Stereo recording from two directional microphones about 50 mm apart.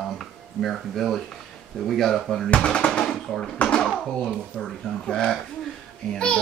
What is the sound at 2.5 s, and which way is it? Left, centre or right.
Speech, left.